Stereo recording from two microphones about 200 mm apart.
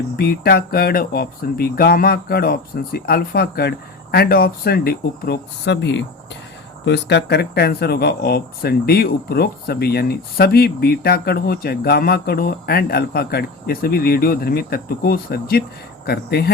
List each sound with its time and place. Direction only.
0.2 s speech: 50° left (ahead or behind)